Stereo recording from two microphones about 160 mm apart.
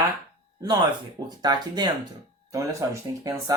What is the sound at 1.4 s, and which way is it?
Speech, 25° right (ahead or behind).